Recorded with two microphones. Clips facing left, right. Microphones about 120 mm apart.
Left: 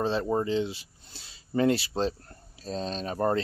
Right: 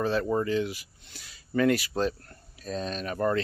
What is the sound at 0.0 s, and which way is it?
Speech, 25° left (ahead or behind).